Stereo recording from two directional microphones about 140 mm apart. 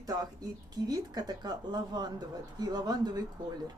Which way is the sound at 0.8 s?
30° right (ahead or behind).